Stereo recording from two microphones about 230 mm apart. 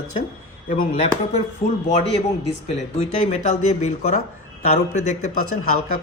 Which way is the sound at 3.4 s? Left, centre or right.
Left.